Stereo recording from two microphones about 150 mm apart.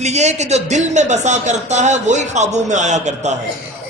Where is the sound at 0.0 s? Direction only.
50° right (ahead or behind).